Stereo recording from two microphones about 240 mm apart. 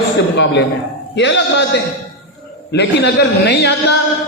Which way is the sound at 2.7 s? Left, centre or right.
Left.